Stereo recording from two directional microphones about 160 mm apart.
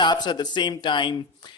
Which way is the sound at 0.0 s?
30° left (ahead or behind).